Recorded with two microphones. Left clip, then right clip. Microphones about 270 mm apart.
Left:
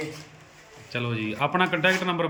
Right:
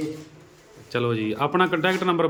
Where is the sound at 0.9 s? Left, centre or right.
Centre.